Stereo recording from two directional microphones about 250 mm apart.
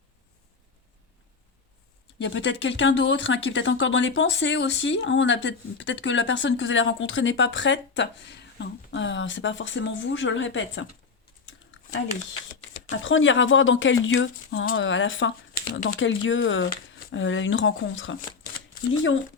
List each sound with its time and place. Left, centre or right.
2.1 s speech: left
12.9 s speech: left